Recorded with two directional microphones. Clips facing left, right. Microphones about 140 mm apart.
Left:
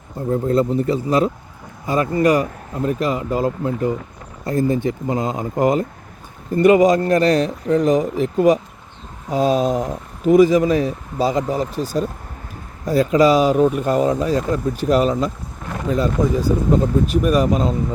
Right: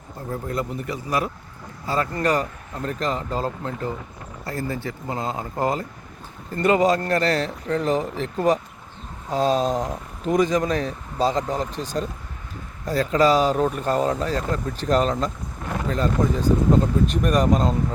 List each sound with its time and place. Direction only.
0.3 s speech: 30° left (ahead or behind)
1.9 s speech: 15° left (ahead or behind)